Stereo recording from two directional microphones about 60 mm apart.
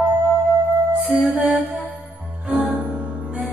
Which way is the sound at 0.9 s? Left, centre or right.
Right.